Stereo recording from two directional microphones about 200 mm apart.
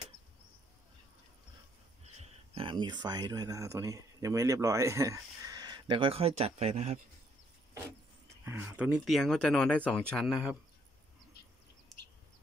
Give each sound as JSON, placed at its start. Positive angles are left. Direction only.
{"t": 2.5, "sound": "speech", "side_deg": -25}
{"t": 8.5, "sound": "speech", "side_deg": -10}